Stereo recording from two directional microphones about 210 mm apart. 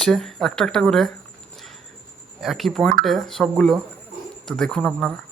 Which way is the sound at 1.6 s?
Centre (ahead or behind).